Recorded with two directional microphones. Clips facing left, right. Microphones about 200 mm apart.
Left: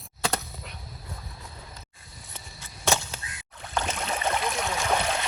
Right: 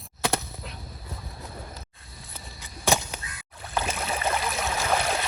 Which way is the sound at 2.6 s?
15° right (ahead or behind).